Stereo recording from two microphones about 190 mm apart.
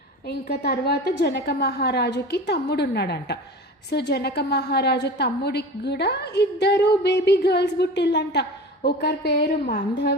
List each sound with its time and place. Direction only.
0.3 s a woman's voice: 60° left (ahead or behind)